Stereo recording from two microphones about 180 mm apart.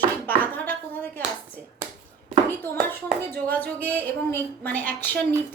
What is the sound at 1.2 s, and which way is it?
Clapping, 10° left (ahead or behind).